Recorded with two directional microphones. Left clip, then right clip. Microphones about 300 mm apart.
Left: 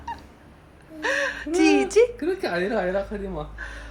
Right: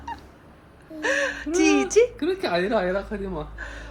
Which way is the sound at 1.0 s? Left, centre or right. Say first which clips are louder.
Right 1 dB; centre.